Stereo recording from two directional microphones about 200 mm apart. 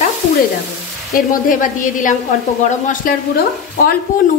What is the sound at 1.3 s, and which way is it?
A woman's voice, 40° left (ahead or behind).